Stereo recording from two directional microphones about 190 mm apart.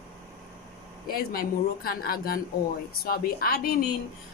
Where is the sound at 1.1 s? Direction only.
50° left (ahead or behind).